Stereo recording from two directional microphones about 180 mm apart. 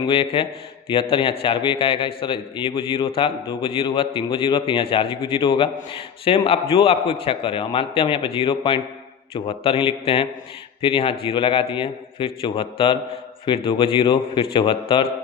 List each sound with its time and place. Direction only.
0.0 s a man's voice: 30° left (ahead or behind)